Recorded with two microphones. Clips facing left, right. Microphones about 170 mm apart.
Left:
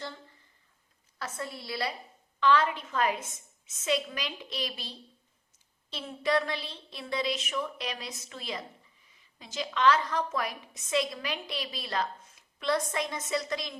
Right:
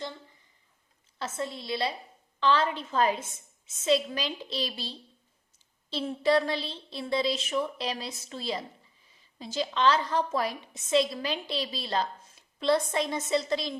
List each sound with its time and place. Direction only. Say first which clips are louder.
1.2 s a woman's voice: right 4 dB; 25° right (ahead or behind)